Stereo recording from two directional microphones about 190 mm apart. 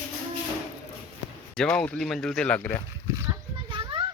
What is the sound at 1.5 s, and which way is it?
Speech, 5° left (ahead or behind).